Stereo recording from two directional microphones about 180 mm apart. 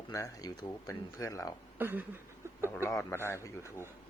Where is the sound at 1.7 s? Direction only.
10° right (ahead or behind).